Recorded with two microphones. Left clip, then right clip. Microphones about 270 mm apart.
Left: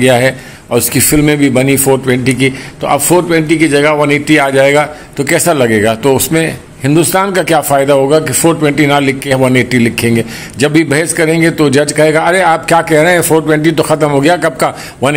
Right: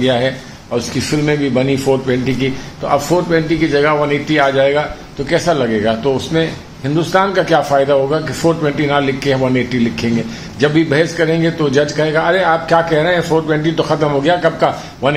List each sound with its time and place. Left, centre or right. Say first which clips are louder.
0.0 s a man's voice: left 6 dB; left